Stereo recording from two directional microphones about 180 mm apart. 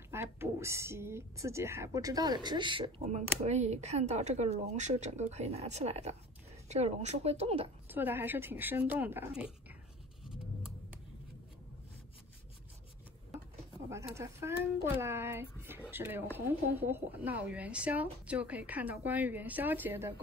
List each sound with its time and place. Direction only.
0.1 s speech: 15° right (ahead or behind)
3.1 s speech: 40° right (ahead or behind)
7.9 s speech: 10° right (ahead or behind)
13.8 s speech: 15° right (ahead or behind)